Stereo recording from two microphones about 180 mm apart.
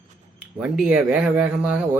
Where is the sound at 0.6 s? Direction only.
5° right (ahead or behind).